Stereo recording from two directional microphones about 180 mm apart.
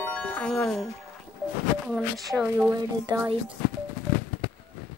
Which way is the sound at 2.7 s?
25° right (ahead or behind).